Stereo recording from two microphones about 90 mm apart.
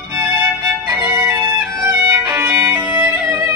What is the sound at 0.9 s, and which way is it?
Violin, 25° right (ahead or behind).